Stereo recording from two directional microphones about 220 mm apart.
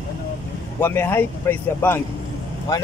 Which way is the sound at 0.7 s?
10° left (ahead or behind).